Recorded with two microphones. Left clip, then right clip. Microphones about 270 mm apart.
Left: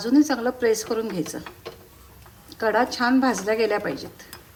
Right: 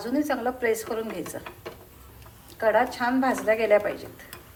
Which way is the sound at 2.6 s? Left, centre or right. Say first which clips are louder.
Left 1 dB; left.